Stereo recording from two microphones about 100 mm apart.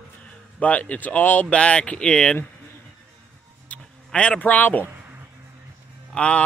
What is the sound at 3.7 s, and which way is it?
Speech, 10° left (ahead or behind).